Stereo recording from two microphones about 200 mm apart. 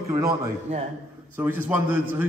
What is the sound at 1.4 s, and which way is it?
Speech, 10° right (ahead or behind).